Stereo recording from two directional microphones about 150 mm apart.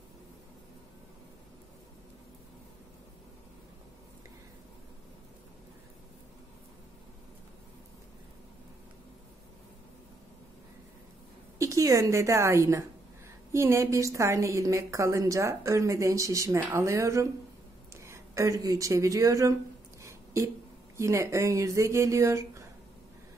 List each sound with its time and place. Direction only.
11.5 s a woman's voice: 20° right (ahead or behind)